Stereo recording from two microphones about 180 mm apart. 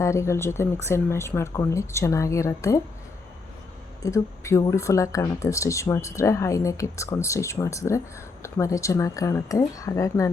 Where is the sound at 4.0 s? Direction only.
15° left (ahead or behind).